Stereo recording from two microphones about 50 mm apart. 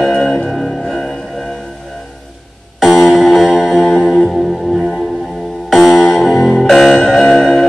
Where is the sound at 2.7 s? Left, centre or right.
Centre.